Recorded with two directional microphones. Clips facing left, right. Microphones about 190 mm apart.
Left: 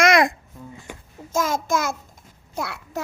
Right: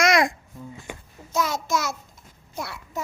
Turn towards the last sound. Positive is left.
turn(degrees=65)  # may be behind; listen again after turning